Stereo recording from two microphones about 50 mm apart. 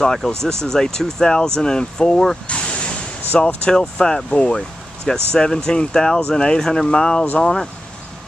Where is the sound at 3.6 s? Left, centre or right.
Centre.